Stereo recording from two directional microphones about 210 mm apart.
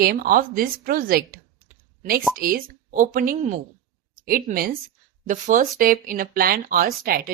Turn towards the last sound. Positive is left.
turn(degrees=-45)  # may be behind; listen again after turning